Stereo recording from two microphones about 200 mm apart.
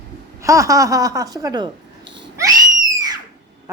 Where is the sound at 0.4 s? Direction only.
15° right (ahead or behind).